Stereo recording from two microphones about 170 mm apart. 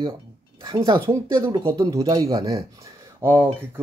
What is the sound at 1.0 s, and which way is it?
Speech, 15° right (ahead or behind).